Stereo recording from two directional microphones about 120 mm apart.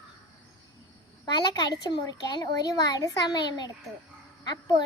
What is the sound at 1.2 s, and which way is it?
A child's voice, 35° left (ahead or behind).